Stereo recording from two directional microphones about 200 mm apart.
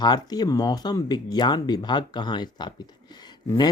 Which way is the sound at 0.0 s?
20° left (ahead or behind).